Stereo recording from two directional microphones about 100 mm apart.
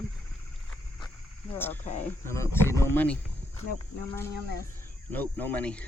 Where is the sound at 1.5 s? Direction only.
20° left (ahead or behind).